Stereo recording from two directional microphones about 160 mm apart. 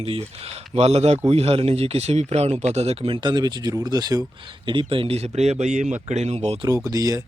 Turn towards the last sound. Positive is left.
turn(degrees=-20)  # may be behind; listen again after turning